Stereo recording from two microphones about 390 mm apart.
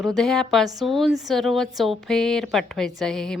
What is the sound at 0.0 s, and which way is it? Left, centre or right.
A woman's voice, centre.